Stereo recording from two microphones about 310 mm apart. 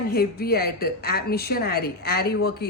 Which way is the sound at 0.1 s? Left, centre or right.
Left.